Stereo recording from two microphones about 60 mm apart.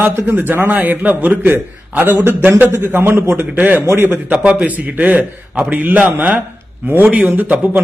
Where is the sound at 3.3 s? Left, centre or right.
Right.